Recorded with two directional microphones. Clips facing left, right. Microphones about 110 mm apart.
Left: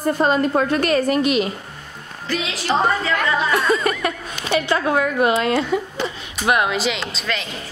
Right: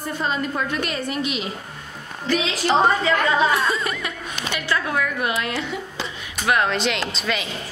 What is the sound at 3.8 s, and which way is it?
Speech, 50° left (ahead or behind).